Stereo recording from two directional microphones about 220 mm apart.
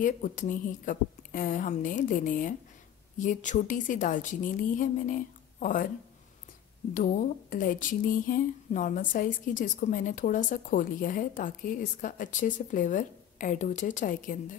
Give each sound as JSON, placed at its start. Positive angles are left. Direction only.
{"t": 0.0, "sound": "speech", "side_deg": 35}
{"t": 6.9, "sound": "speech", "side_deg": 35}